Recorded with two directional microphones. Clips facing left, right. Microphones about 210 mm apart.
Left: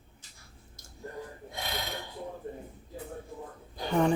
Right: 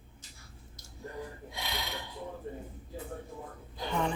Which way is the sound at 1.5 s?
45° left (ahead or behind).